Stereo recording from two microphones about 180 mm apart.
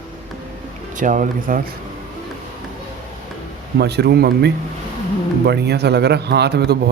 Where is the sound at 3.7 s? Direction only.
65° right (ahead or behind).